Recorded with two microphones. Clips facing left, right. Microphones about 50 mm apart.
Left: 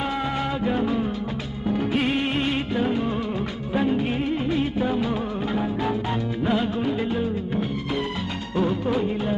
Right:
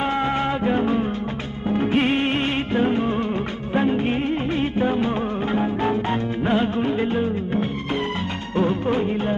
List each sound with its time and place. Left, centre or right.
0.6 s music: right
3.8 s music of bollywood: right
5.8 s music: right